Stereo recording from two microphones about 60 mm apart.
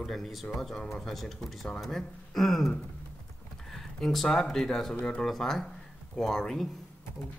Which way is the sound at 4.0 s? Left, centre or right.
Centre.